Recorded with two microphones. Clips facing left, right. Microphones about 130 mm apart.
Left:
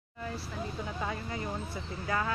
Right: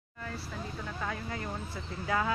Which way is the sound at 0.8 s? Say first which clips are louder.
Left 1 dB; 15° left (ahead or behind).